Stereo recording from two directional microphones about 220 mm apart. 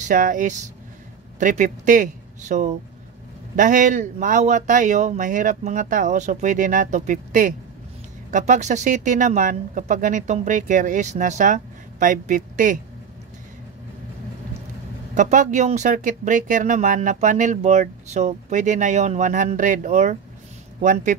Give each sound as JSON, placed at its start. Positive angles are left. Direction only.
{"t": 0.1, "sound": "speech", "side_deg": -35}
{"t": 15.1, "sound": "speech", "side_deg": -35}